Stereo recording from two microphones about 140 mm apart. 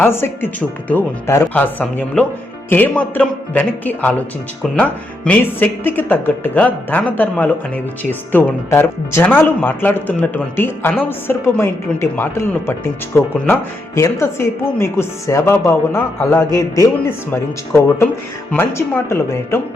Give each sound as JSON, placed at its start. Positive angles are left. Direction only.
{"t": 0.0, "sound": "speech", "side_deg": 15}
{"t": 18.5, "sound": "speech", "side_deg": 15}